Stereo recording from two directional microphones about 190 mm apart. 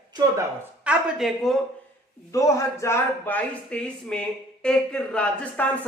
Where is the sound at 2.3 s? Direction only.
15° left (ahead or behind).